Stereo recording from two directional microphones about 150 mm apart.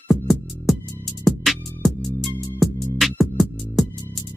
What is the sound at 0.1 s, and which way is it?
Music, centre (ahead or behind).